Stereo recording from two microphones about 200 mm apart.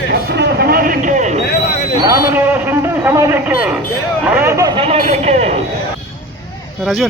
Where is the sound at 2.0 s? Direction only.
10° right (ahead or behind).